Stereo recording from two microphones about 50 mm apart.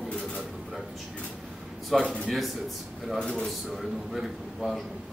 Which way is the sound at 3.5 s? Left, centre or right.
Centre.